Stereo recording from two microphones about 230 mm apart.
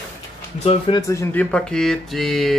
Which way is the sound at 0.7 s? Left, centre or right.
Left.